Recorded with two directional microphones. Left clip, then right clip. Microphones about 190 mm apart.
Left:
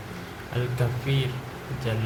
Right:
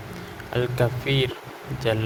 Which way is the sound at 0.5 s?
50° right (ahead or behind).